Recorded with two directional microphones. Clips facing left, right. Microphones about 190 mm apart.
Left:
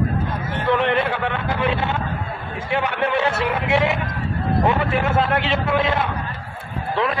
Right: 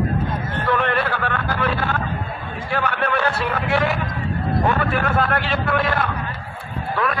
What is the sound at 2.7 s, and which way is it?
A man's voice, 20° left (ahead or behind).